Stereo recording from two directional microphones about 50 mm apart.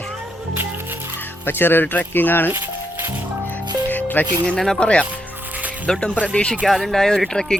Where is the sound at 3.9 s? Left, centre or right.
Left.